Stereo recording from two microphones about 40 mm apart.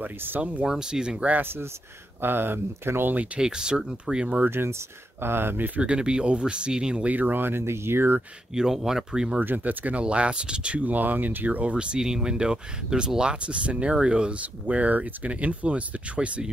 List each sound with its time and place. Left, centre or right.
0.0 s speech: right
0.4 s speech: right
0.7 s speech: centre
1.4 s speech: right
3.3 s speech: centre
4.0 s speech: right
4.5 s speech: right
5.8 s speech: right
7.1 s speech: right
8.5 s speech: centre
9.4 s speech: right
9.9 s speech: right
10.8 s speech: right
14.4 s speech: right